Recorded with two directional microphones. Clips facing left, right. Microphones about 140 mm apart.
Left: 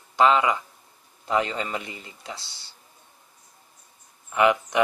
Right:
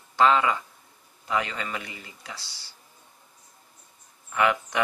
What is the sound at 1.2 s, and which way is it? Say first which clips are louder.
Speech: left 4 dB; 30° left (ahead or behind).